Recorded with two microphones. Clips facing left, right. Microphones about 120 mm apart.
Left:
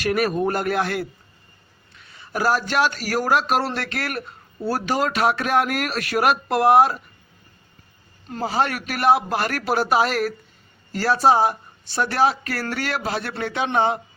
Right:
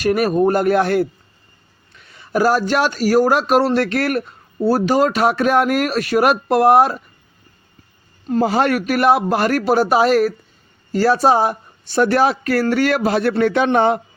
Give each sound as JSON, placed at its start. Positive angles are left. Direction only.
{"t": 0.0, "sound": "speech", "side_deg": -40}
{"t": 4.6, "sound": "speech", "side_deg": -35}
{"t": 8.4, "sound": "speech", "side_deg": -55}